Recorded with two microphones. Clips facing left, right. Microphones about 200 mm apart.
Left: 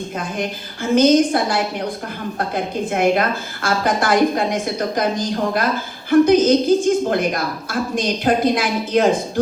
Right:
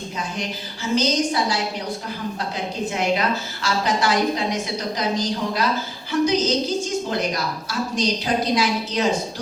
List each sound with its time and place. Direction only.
0.2 s a woman's voice: 55° left (ahead or behind)